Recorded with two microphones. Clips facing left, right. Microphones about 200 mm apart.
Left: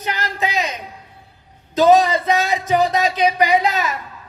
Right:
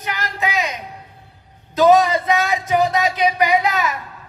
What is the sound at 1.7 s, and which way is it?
A man's voice, 20° left (ahead or behind).